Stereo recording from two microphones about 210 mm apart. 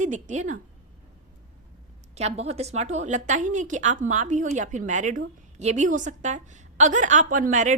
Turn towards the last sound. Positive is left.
turn(degrees=-35)  # may be behind; listen again after turning